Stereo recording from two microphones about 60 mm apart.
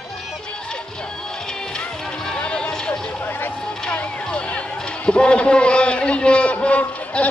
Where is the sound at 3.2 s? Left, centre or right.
Left.